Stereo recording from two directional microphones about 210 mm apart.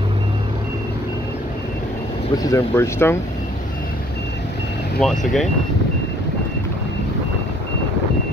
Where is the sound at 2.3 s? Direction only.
15° left (ahead or behind).